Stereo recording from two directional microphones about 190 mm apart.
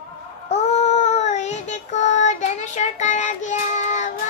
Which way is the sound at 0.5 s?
35° left (ahead or behind).